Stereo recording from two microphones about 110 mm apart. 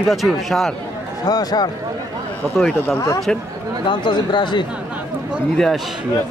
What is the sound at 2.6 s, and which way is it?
Speech, centre (ahead or behind).